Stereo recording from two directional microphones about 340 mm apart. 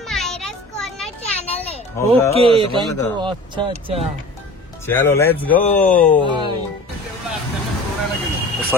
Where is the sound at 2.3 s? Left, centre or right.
Centre.